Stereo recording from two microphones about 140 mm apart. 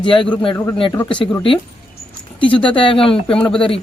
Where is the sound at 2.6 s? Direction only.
35° left (ahead or behind).